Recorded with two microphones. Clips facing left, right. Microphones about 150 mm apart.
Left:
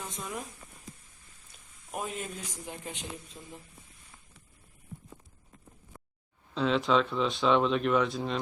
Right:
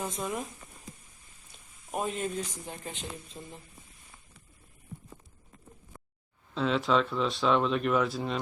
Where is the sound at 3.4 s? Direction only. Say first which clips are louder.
Right 3 dB; 20° right (ahead or behind).